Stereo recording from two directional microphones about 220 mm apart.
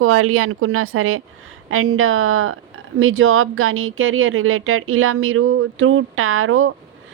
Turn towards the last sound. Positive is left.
turn(degrees=-65)  # may be behind; listen again after turning